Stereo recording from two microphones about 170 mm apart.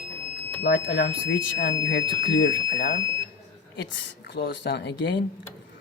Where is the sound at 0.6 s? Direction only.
85° left.